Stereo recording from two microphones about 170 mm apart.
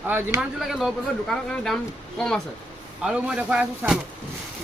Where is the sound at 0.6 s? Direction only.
Centre (ahead or behind).